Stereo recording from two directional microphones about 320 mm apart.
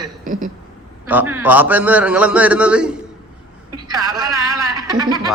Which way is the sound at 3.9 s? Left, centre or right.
Centre.